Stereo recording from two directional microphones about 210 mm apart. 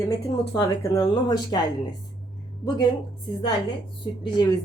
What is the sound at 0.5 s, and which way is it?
Speech, 15° left (ahead or behind).